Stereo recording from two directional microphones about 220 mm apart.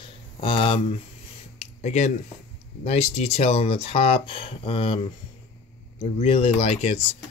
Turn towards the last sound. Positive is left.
turn(degrees=30)  # may be behind; listen again after turning